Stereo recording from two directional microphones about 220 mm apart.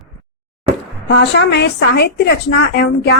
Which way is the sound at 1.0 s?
50° left (ahead or behind).